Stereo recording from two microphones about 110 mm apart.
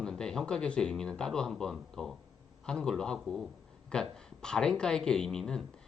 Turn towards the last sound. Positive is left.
turn(degrees=5)  # may be behind; listen again after turning